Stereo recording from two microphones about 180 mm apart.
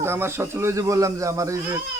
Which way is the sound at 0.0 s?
15° right (ahead or behind).